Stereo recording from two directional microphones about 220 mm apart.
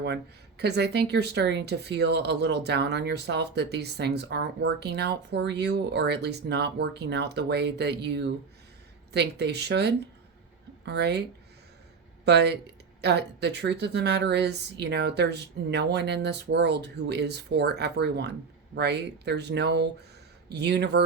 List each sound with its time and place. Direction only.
0.6 s speech: 50° right (ahead or behind)